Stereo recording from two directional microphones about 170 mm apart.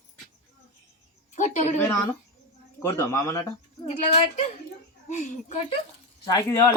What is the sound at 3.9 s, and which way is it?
A woman's voice, 40° left (ahead or behind).